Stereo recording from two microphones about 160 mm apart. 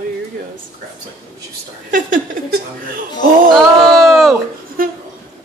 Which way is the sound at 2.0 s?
55° right (ahead or behind).